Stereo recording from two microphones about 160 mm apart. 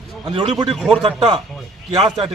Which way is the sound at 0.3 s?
40° right (ahead or behind).